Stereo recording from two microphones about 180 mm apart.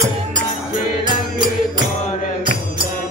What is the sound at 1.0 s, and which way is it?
Music, 25° right (ahead or behind).